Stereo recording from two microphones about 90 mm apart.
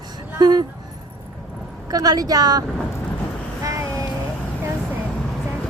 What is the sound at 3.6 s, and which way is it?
Vehicle, 40° right (ahead or behind).